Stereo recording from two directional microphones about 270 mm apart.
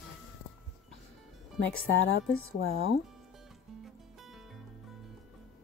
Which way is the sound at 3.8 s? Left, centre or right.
Centre.